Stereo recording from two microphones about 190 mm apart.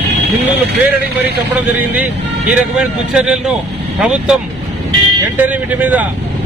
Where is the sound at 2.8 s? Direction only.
5° right (ahead or behind).